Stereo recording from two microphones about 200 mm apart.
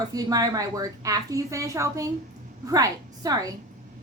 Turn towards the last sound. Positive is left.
turn(degrees=-20)  # may be behind; listen again after turning